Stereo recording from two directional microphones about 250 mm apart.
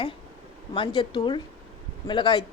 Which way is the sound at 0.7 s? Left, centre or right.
Centre.